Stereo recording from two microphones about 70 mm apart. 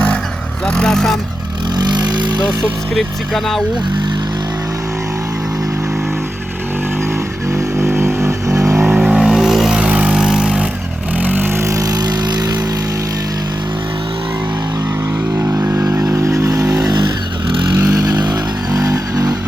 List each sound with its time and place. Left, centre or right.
0.7 s a sound: centre
1.8 s vehicle: right
2.9 s speech: centre
7.5 s vehicle: right
8.5 s vehicle: right
8.8 s vehicle: centre
9.8 s vehicle: centre
10.2 s vehicle: centre
11.2 s vehicle: right
11.7 s vehicle: right
15.4 s vehicle: right
17.9 s vehicle: right
18.8 s vehicle: right